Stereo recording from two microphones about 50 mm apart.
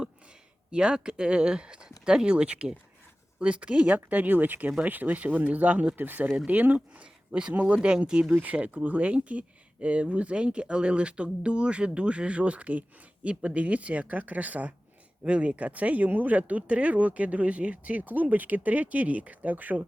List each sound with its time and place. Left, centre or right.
0.7 s speech: centre
6.0 s speech: right; by 8.3 s centre
8.3 s speech: right